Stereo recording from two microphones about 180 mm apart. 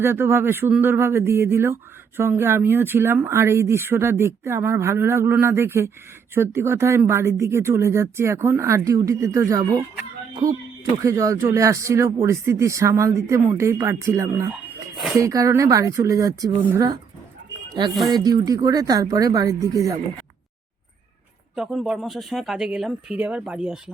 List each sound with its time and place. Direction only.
0.0 s speech: 15° right (ahead or behind)
10.9 s speech: 20° right (ahead or behind)
14.9 s speech: centre (ahead or behind)
15.2 s speech: 20° right (ahead or behind)
21.5 s speech: 5° right (ahead or behind)